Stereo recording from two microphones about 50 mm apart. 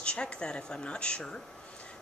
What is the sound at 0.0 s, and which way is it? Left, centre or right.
Speech, left.